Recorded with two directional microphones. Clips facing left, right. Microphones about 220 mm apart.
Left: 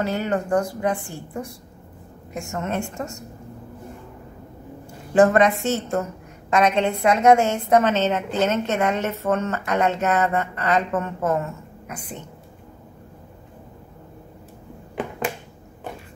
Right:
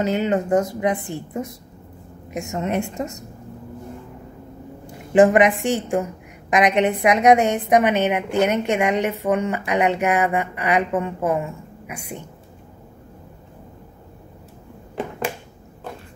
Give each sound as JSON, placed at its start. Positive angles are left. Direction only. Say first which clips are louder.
{"t": 0.0, "sound": "a woman's voice", "louder": "right 3 dB", "side_deg": -20}
{"t": 4.8, "sound": "a woman's voice", "louder": "right 2 dB", "side_deg": -15}